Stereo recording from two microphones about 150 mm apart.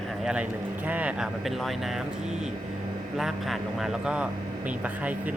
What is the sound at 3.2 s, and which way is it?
A man's voice, centre (ahead or behind).